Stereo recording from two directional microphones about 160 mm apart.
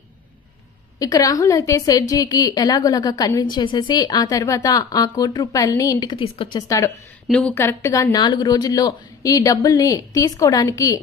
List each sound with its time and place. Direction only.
0.9 s a woman's voice: 20° left (ahead or behind)
7.2 s a woman's voice: 5° left (ahead or behind)
7.5 s a woman's voice: 15° left (ahead or behind)